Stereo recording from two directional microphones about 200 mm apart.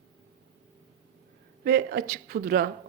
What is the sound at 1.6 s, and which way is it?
Speech, 55° right (ahead or behind).